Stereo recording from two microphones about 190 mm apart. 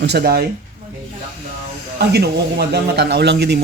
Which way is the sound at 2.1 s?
60° right (ahead or behind).